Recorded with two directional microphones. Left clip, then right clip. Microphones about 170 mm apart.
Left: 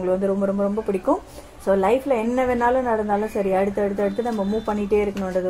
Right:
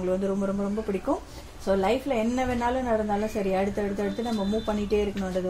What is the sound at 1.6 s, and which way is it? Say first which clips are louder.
A woman's voice: left 6 dB; 20° right (ahead or behind).